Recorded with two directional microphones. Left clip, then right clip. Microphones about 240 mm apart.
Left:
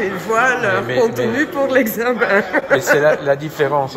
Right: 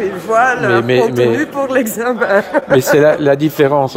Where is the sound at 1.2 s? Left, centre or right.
Right.